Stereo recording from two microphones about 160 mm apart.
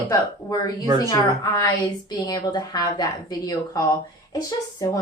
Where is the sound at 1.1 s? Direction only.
20° left (ahead or behind).